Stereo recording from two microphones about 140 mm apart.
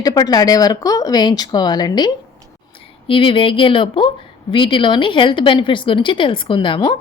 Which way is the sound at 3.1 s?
40° left (ahead or behind).